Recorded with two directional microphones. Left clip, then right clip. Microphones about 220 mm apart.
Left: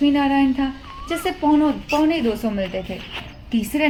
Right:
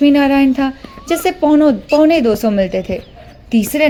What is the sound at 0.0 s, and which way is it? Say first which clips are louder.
A woman's voice: right 7 dB; 45° right (ahead or behind).